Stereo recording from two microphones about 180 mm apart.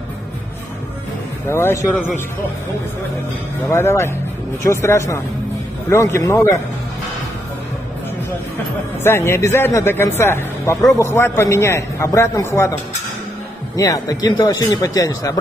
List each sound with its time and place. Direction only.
1.5 s speech: 15° left (ahead or behind)
3.6 s speech: 15° left (ahead or behind)
9.0 s speech: 15° left (ahead or behind)
13.7 s a man's voice: 20° left (ahead or behind)